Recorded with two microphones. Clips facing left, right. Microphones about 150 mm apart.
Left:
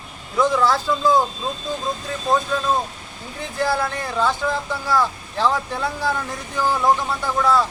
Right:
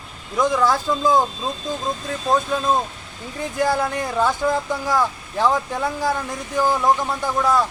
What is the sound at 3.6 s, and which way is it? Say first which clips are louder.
Speech: right 1 dB; 15° right (ahead or behind).